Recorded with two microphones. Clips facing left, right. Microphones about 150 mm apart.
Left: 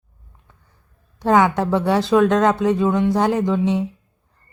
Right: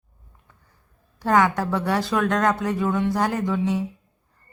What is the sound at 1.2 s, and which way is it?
Speech, 20° left (ahead or behind).